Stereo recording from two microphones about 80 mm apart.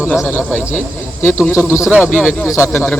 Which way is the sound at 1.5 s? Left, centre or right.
Left.